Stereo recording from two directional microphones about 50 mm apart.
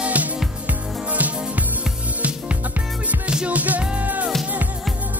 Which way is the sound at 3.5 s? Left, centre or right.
Right.